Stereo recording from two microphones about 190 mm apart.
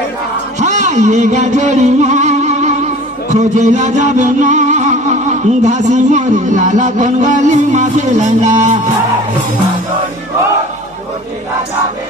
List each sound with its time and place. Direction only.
0.6 s music: 40° right (ahead or behind)
5.6 s a man's voice: 40° right (ahead or behind)